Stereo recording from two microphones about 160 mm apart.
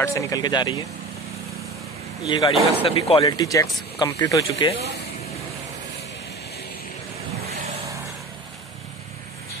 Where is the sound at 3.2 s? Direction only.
20° left (ahead or behind).